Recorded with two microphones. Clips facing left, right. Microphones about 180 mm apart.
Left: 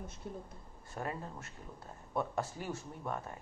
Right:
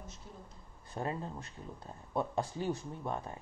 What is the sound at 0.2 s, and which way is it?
Speech, 55° left (ahead or behind).